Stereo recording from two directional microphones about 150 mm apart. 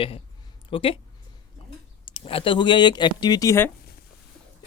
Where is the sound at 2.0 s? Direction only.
35° left (ahead or behind); by 3.7 s 15° left (ahead or behind).